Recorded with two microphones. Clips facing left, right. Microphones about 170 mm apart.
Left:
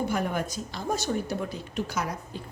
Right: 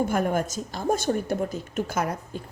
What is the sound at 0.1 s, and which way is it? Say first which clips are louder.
A woman's voice: right 4 dB; 45° right (ahead or behind).